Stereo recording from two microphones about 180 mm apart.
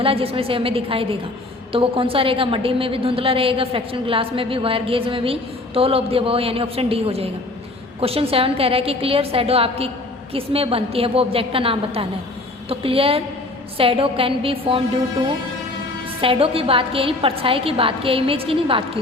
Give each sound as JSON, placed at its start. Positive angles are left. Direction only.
{"t": 0.0, "sound": "a woman's voice", "side_deg": -30}
{"t": 16.2, "sound": "a woman's voice", "side_deg": -30}